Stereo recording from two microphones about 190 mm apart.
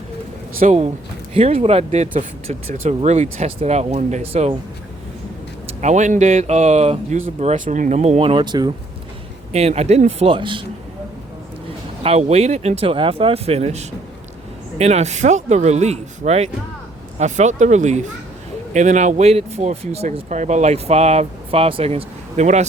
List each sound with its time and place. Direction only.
0.6 s speech: 35° right (ahead or behind)
5.8 s speech: 40° right (ahead or behind); by 8.7 s 20° right (ahead or behind)
9.5 s speech: 35° right (ahead or behind)
12.0 s speech: 35° right (ahead or behind)